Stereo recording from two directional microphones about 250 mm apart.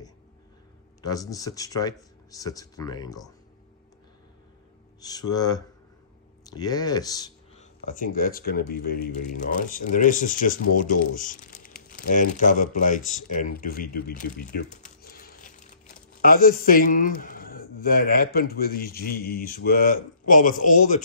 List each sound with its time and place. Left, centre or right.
1.0 s speech: centre
5.0 s speech: centre
7.5 s a man's voice: left
13.6 s crumpling: left
16.2 s a man's voice: left